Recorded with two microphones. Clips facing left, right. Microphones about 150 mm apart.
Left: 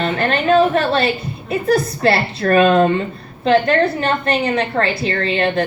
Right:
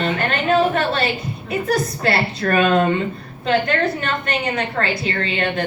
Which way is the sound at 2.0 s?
30° left (ahead or behind).